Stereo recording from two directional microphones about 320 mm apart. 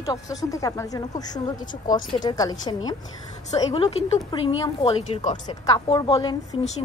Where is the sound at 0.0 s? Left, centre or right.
Centre.